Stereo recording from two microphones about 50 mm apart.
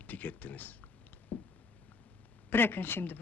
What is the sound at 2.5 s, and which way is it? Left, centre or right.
Speech, left.